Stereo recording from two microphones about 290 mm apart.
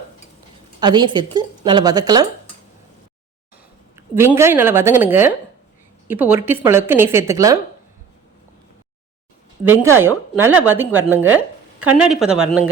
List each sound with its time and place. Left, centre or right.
0.8 s a woman's voice: centre
3.9 s a woman's voice: centre
10.0 s a woman's voice: centre